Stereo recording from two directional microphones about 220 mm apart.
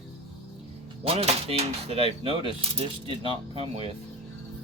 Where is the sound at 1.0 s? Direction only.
30° right (ahead or behind).